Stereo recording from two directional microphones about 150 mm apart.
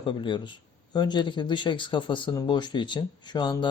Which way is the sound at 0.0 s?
35° left (ahead or behind).